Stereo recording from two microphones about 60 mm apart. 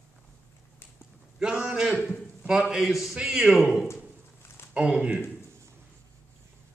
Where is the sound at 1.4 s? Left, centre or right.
Centre.